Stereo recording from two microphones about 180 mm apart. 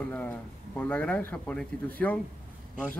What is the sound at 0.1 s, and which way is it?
Speech, 10° left (ahead or behind).